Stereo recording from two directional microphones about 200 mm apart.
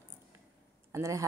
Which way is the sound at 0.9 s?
15° right (ahead or behind).